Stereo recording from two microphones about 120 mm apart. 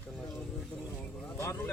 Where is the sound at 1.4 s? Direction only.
25° left (ahead or behind).